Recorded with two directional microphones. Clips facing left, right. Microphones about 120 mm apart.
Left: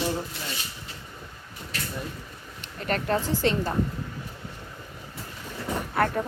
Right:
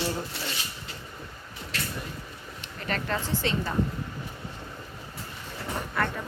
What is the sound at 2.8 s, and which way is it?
Speech, 45° left (ahead or behind).